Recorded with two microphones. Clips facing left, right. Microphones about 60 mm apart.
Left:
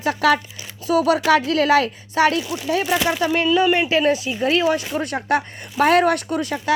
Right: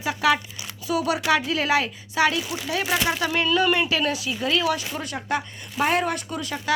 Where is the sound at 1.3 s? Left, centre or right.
Left.